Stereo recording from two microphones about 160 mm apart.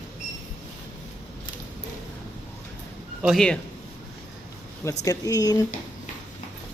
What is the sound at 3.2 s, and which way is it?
Speech, centre (ahead or behind).